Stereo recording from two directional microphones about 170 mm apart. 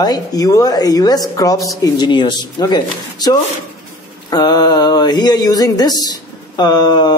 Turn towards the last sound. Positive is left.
turn(degrees=25)  # may be behind; listen again after turning